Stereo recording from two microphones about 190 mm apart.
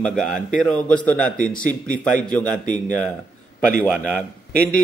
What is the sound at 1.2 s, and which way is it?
Speech, 45° left (ahead or behind).